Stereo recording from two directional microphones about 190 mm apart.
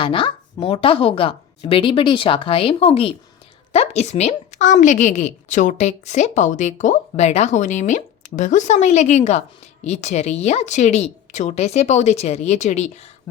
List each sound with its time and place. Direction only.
0.0 s a woman's voice: 25° left (ahead or behind)